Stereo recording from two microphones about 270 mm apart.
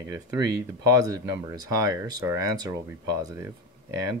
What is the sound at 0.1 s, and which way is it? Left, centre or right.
Speech, centre.